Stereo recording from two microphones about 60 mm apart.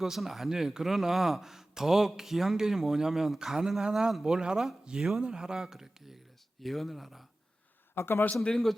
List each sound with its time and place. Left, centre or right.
0.0 s speech: centre
4.4 s speech: centre
7.9 s a man's voice: left
8.4 s a man's voice: centre